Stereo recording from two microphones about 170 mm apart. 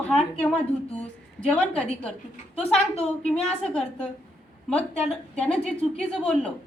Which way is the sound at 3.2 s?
5° left (ahead or behind).